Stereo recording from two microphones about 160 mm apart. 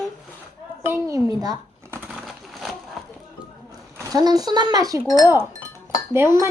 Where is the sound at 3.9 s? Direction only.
25° right (ahead or behind).